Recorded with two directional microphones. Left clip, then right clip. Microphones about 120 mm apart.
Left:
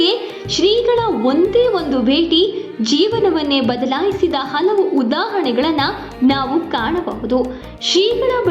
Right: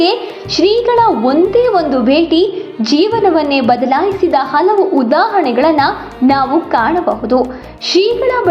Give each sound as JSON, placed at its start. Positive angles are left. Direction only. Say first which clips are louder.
{"t": 0.0, "sound": "a woman's voice", "louder": "right 3 dB", "side_deg": 30}
{"t": 4.6, "sound": "a woman's voice", "louder": "right 4 dB", "side_deg": 0}
{"t": 5.0, "sound": "a woman's voice", "louder": "right 7 dB", "side_deg": 30}